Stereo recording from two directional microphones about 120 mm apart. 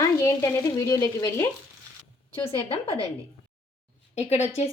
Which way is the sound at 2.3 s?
50° left (ahead or behind).